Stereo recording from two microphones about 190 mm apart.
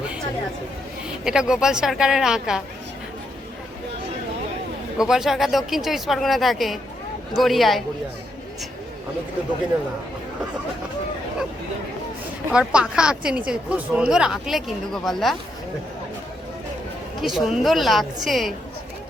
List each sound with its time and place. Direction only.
1.2 s a woman's voice: 5° right (ahead or behind)
4.9 s a woman's voice: centre (ahead or behind)
12.5 s a woman's voice: 5° right (ahead or behind)
17.2 s a woman's voice: centre (ahead or behind)